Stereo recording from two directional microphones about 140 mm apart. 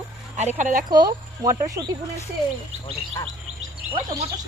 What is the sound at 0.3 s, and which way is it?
Speech, 60° right (ahead or behind).